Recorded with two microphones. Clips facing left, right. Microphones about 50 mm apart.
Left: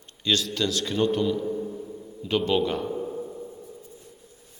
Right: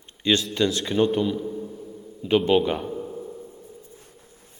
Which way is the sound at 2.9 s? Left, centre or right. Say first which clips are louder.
Left 2 dB; centre.